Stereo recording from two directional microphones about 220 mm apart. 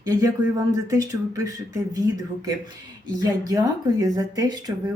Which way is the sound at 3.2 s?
15° right (ahead or behind).